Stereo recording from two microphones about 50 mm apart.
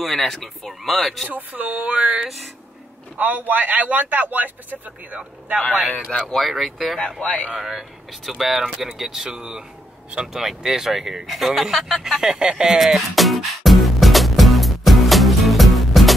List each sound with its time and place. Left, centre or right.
0.0 s speech: centre
1.3 s speech: right
1.7 s a sound: right
2.2 s speech: centre
3.2 s speech: right
6.2 s speech: centre
7.2 s a man's voice: left
7.5 s speech: centre
12.2 s speech: centre
12.7 s music: centre